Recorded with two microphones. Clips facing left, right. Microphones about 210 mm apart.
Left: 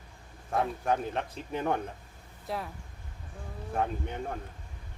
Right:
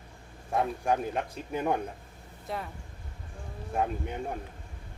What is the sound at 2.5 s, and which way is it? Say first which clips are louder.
Speech: left 1 dB; centre (ahead or behind).